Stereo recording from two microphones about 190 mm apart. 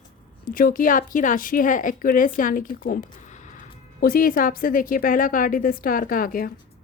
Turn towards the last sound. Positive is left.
turn(degrees=50)  # may be behind; listen again after turning